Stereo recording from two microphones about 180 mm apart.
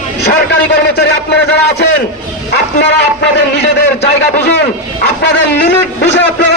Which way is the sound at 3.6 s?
65° left (ahead or behind).